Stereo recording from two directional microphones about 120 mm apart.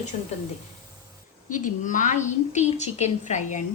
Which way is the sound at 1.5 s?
90° left.